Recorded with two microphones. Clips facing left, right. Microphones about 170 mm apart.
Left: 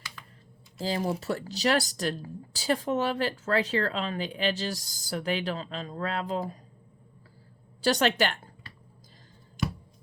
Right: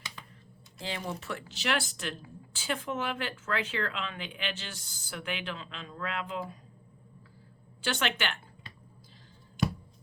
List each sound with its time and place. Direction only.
0.8 s speech: 40° left (ahead or behind)
7.8 s speech: 35° left (ahead or behind)